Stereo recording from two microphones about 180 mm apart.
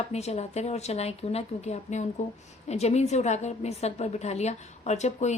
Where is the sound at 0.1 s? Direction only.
35° left (ahead or behind).